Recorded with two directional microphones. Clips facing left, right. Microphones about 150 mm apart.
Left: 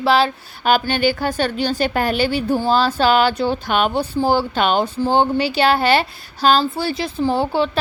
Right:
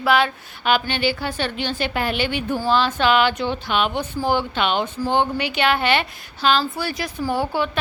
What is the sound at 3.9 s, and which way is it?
Speech, 35° left (ahead or behind).